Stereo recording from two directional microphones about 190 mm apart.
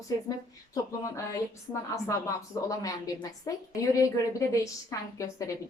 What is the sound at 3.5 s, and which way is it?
Speech, 15° left (ahead or behind).